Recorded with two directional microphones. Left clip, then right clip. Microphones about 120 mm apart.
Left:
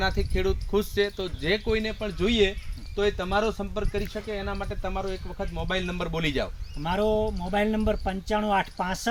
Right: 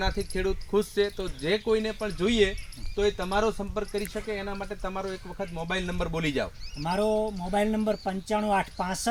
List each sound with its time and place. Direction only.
0.0 s speech: 20° left (ahead or behind)
6.8 s speech: 5° right (ahead or behind)